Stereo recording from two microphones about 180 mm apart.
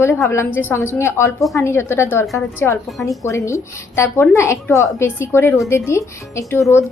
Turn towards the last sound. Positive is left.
turn(degrees=15)  # may be behind; listen again after turning